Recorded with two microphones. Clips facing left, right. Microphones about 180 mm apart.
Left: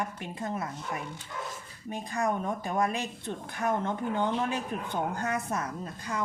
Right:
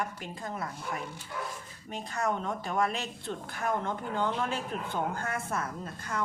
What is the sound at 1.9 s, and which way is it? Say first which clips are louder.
Speech: left 2 dB; 15° left (ahead or behind).